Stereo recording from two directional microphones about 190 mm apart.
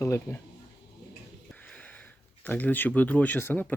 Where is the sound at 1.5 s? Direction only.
5° left (ahead or behind).